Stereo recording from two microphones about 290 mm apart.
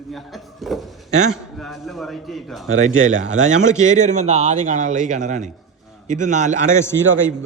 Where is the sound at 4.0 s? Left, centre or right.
Right.